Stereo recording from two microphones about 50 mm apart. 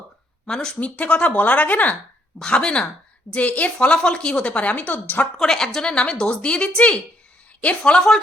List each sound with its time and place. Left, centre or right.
0.4 s speech: centre; by 2.0 s left
2.4 s speech: centre
3.3 s speech: left
5.4 s speech: centre